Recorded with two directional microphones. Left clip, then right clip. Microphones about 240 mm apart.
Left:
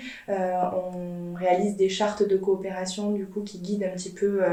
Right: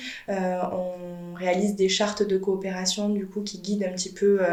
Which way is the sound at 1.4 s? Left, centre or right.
Right.